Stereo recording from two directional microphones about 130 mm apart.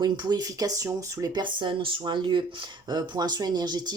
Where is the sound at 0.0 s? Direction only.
30° right (ahead or behind).